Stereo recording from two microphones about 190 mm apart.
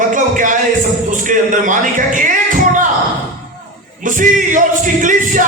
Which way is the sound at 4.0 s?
45° right (ahead or behind).